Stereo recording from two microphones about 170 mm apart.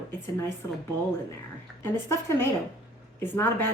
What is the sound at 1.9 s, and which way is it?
A woman's voice, 15° left (ahead or behind).